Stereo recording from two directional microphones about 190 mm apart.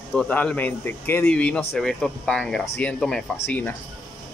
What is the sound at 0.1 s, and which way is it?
Speech, 10° left (ahead or behind).